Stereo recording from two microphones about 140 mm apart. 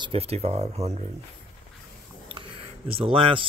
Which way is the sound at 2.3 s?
40° right (ahead or behind).